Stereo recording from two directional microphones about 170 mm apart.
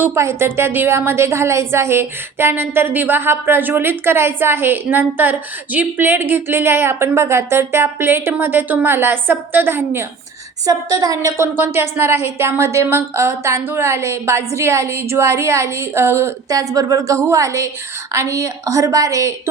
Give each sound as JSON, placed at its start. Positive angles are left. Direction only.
{"t": 0.0, "sound": "a woman's voice", "side_deg": -15}